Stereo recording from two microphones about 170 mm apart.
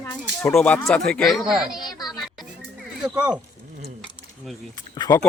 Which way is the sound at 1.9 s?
25° left (ahead or behind).